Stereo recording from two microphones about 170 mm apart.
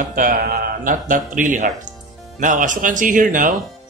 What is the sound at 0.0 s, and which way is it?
Speech, 55° right (ahead or behind).